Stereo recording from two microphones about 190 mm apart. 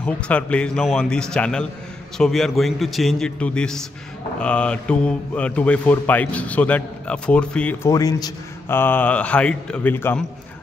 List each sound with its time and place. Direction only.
0.0 s a man's voice: 5° left (ahead or behind)
7.9 s a man's voice: 20° left (ahead or behind)